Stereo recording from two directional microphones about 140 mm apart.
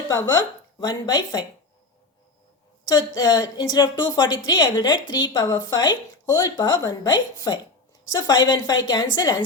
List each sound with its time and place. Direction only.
0.1 s speech: 30° left (ahead or behind)
3.2 s speech: 25° left (ahead or behind)